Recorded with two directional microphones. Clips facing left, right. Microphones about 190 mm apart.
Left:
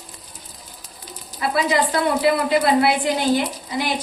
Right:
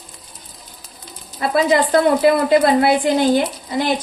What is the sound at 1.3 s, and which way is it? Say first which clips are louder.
A woman's voice: right 4 dB; 45° right (ahead or behind).